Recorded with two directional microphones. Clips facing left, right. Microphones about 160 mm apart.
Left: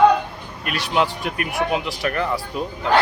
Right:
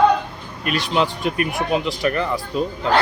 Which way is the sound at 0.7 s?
5° left (ahead or behind).